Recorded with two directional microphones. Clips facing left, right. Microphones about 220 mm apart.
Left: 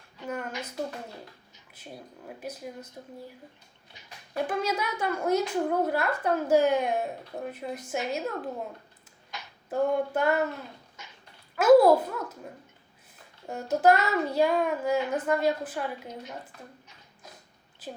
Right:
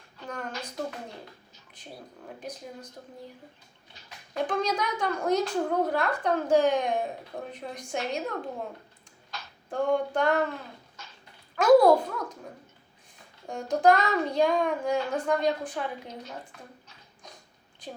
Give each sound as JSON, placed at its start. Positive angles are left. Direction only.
{"t": 0.3, "sound": "a woman's voice", "side_deg": 5}
{"t": 1.7, "sound": "a woman's voice", "side_deg": 5}
{"t": 4.4, "sound": "a woman's voice", "side_deg": 5}
{"t": 9.3, "sound": "a sound", "side_deg": 15}
{"t": 9.6, "sound": "child singing", "side_deg": 5}
{"t": 11.0, "sound": "dog", "side_deg": 15}
{"t": 11.5, "sound": "child singing", "side_deg": 5}
{"t": 13.5, "sound": "child singing", "side_deg": 5}
{"t": 17.8, "sound": "a sound", "side_deg": 5}